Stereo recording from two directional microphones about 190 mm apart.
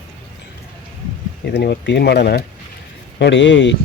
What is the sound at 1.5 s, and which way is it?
Speech, 60° left (ahead or behind).